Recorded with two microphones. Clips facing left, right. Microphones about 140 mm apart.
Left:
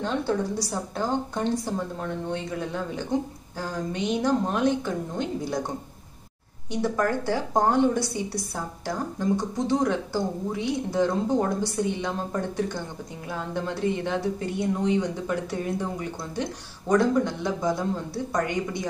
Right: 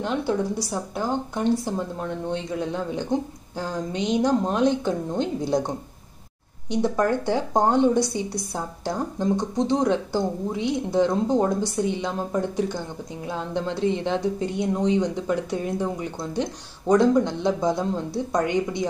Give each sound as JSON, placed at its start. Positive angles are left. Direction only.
{"t": 0.0, "sound": "a woman's voice", "side_deg": -10}
{"t": 6.7, "sound": "a woman's voice", "side_deg": -20}